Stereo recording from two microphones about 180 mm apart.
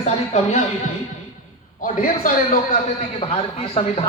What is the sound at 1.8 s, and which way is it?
Speech, 50° left (ahead or behind).